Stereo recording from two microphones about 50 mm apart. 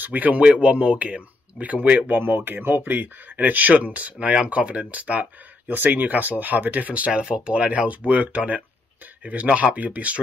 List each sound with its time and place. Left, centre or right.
0.0 s speech: right
7.1 s speech: centre